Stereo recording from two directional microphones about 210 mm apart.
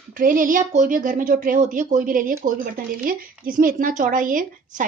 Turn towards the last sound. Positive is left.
turn(degrees=-40)  # may be behind; listen again after turning